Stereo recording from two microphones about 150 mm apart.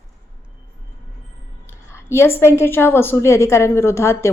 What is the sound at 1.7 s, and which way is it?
A woman's voice, 15° left (ahead or behind).